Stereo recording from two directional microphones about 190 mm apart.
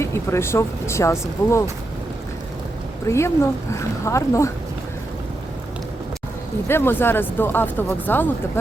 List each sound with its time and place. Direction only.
0.0 s speech: 15° left (ahead or behind)
3.1 s speech: 15° left (ahead or behind)
6.7 s speech: 10° left (ahead or behind)